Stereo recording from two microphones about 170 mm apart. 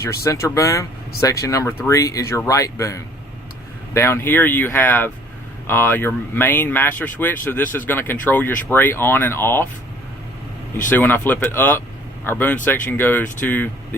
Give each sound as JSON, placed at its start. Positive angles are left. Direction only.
{"t": 0.0, "sound": "speech", "side_deg": 15}
{"t": 10.8, "sound": "speech", "side_deg": 10}